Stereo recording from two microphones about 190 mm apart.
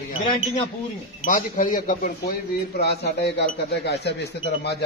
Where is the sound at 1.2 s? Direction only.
45° left (ahead or behind).